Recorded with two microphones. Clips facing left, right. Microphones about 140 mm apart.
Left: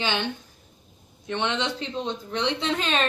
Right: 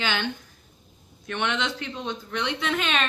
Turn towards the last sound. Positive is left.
turn(degrees=35)  # may be behind; listen again after turning